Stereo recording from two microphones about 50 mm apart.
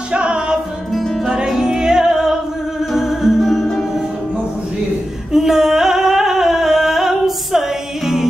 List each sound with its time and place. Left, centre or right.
0.1 s music: right
0.9 s music: centre
1.3 s music: centre
5.3 s music: centre